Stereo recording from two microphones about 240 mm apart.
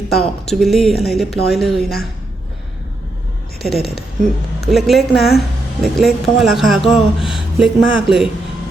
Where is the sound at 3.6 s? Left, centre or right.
Centre.